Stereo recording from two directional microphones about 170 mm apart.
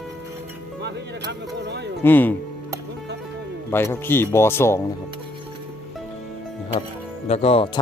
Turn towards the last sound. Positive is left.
turn(degrees=35)  # may be behind; listen again after turning